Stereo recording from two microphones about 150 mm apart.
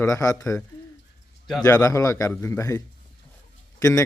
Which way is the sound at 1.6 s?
25° left (ahead or behind).